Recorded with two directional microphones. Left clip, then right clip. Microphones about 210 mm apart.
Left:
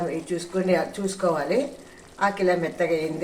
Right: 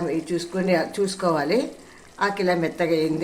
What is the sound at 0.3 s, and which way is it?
Speech, 30° right (ahead or behind).